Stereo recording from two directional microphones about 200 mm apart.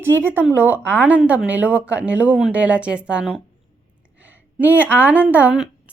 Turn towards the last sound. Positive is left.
turn(degrees=-5)  # may be behind; listen again after turning